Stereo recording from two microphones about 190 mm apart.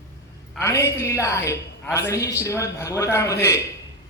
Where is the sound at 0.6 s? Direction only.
15° left (ahead or behind).